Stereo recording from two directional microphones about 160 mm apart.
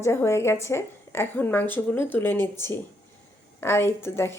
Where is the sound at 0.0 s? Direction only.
15° left (ahead or behind).